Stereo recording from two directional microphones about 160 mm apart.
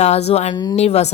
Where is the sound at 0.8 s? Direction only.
40° left (ahead or behind).